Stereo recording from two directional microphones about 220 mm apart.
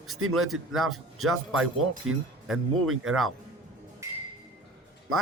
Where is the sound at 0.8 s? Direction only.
75° right (ahead or behind).